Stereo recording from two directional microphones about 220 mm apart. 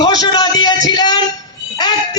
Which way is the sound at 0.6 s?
20° left (ahead or behind).